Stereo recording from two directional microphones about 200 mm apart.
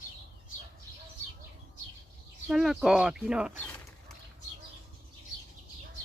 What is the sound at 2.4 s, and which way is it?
Speech, centre (ahead or behind).